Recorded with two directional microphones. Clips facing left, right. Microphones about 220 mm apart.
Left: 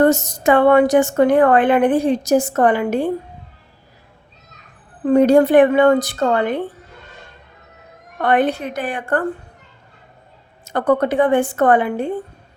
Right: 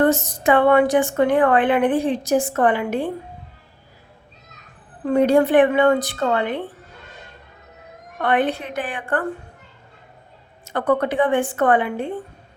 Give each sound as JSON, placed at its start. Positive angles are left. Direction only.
{"t": 0.0, "sound": "a woman's voice", "side_deg": 40}
{"t": 5.0, "sound": "a woman's voice", "side_deg": 40}
{"t": 8.2, "sound": "a woman's voice", "side_deg": 40}
{"t": 10.7, "sound": "a woman's voice", "side_deg": 40}